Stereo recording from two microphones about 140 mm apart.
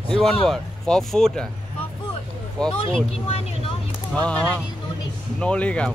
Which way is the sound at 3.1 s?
45° left (ahead or behind).